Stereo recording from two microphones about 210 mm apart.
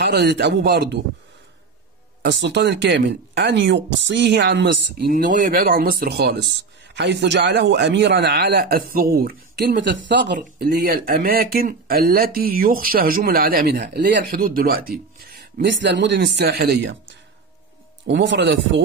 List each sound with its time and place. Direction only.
0.0 s speech: 50° right (ahead or behind)
2.2 s speech: 55° right (ahead or behind)
5.2 s speech: 45° right (ahead or behind)
10.4 s speech: 45° right (ahead or behind)
15.6 s speech: 60° right (ahead or behind)
18.0 s speech: 60° right (ahead or behind)